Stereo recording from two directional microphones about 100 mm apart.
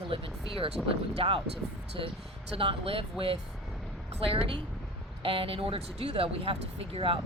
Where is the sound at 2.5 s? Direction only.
65° right (ahead or behind).